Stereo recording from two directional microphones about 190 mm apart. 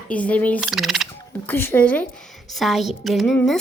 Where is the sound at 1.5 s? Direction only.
10° left (ahead or behind).